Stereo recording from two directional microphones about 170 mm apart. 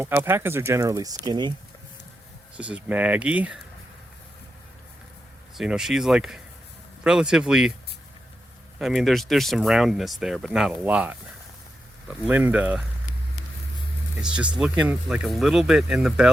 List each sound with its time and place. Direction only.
0.0 s speech: 10° right (ahead or behind)
2.6 s speech: 5° right (ahead or behind)
5.5 s speech: 5° right (ahead or behind)
8.8 s speech: centre (ahead or behind)
14.2 s speech: 5° right (ahead or behind)